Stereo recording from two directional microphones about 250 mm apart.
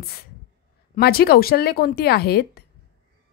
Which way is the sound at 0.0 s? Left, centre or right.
Left.